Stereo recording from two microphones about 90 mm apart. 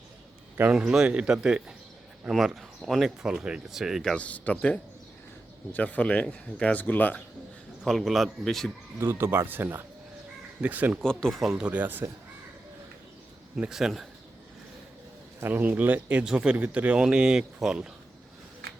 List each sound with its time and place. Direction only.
0.5 s speech: 15° right (ahead or behind)
4.1 s speech: 15° left (ahead or behind)
7.9 s speech: centre (ahead or behind)
9.0 s speech: 25° right (ahead or behind)
11.0 s speech: 5° left (ahead or behind)
11.6 s speech: 15° right (ahead or behind)
13.6 s speech: 5° right (ahead or behind)
15.4 s speech: 20° right (ahead or behind); by 17.9 s 5° right (ahead or behind)